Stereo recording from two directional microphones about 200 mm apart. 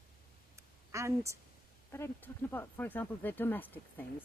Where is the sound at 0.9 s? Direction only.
15° right (ahead or behind).